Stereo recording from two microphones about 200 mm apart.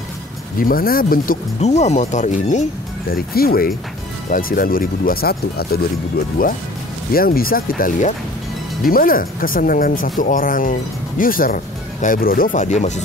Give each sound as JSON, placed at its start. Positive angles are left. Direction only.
{"t": 0.6, "sound": "speech", "side_deg": 45}
{"t": 3.1, "sound": "speech", "side_deg": 50}